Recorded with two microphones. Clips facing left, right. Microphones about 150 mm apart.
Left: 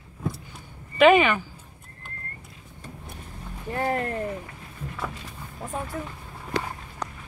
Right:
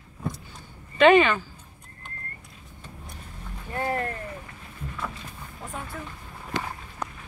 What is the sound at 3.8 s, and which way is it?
Speech, 20° left (ahead or behind).